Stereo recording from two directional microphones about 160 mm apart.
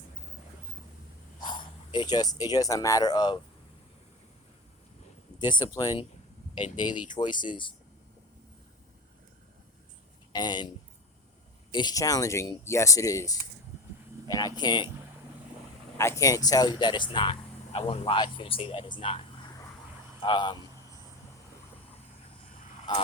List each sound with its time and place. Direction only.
1.4 s speech: 30° left (ahead or behind)
5.4 s speech: 25° left (ahead or behind)
10.3 s speech: 25° left (ahead or behind)
11.7 s speech: 25° left (ahead or behind)
16.0 s speech: 20° left (ahead or behind)
20.2 s speech: 30° left (ahead or behind)